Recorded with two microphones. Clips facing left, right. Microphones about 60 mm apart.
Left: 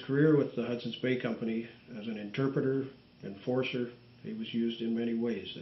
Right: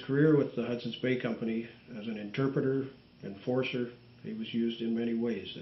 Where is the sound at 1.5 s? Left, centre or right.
Centre.